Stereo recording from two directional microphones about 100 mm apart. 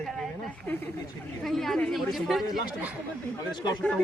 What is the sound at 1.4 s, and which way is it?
A woman's voice, 5° left (ahead or behind).